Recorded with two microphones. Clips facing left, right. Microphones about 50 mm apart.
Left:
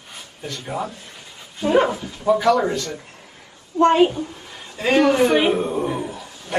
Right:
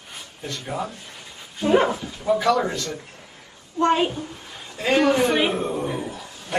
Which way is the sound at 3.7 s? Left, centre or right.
Left.